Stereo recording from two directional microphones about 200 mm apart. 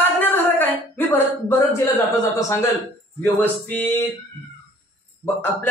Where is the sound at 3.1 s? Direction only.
10° left (ahead or behind).